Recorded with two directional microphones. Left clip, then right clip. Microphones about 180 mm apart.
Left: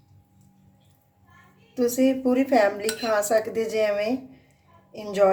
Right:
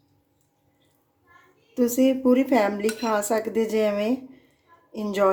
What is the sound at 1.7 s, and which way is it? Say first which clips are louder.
Speech: right 1 dB; 40° right (ahead or behind).